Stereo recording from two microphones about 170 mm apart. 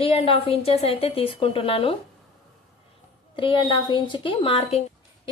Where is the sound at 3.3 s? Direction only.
30° left (ahead or behind).